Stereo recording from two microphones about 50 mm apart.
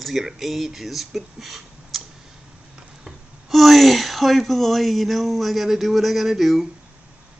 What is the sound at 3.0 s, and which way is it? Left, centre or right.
Speech, centre.